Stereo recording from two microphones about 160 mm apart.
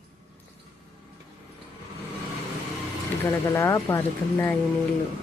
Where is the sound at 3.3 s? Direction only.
15° left (ahead or behind).